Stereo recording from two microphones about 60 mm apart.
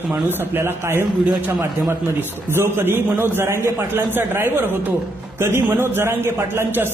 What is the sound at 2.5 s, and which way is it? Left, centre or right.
A man's voice, right.